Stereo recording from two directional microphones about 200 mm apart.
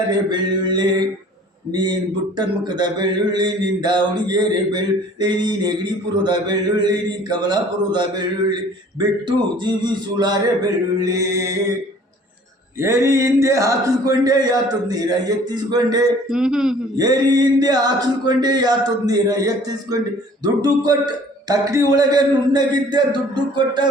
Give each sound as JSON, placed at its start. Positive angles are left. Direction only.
{"t": 0.1, "sound": "mantra", "side_deg": -20}
{"t": 12.8, "sound": "speech", "side_deg": -15}
{"t": 15.5, "sound": "mantra", "side_deg": -20}
{"t": 16.3, "sound": "a man's voice", "side_deg": -5}
{"t": 17.0, "sound": "mantra", "side_deg": -20}